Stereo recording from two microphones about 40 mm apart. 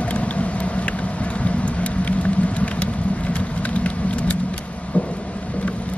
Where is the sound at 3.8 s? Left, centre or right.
Left.